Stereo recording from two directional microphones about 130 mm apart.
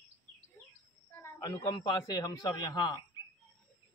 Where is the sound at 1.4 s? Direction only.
30° left (ahead or behind).